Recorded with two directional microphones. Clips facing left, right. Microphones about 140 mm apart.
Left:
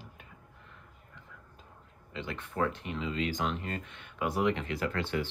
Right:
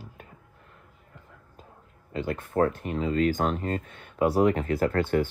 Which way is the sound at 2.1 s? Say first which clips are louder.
Right 9 dB; 40° right (ahead or behind).